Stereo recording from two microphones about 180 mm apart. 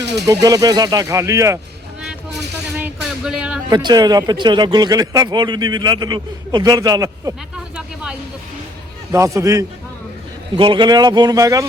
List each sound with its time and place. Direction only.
0.4 s a man's voice: 20° right (ahead or behind)
2.7 s music: 5° right (ahead or behind)
3.7 s a man's voice: 25° right (ahead or behind)
7.5 s a sound: 5° right (ahead or behind)
9.1 s a man's voice: 15° right (ahead or behind)